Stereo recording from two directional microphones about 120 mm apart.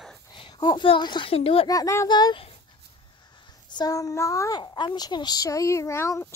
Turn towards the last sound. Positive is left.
turn(degrees=20)  # may be behind; listen again after turning